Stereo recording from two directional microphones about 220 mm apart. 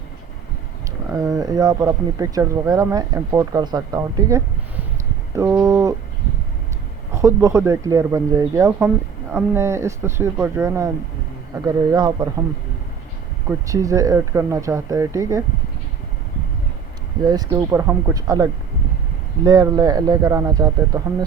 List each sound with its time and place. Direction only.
1.1 s speech: 15° right (ahead or behind)
7.1 s speech: 15° right (ahead or behind)
13.7 s speech: 15° right (ahead or behind)
17.2 s speech: 15° right (ahead or behind)